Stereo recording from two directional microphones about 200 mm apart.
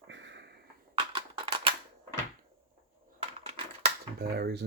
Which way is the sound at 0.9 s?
25° right (ahead or behind).